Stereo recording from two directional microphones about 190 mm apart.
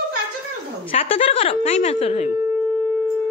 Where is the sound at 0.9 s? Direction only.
30° left (ahead or behind).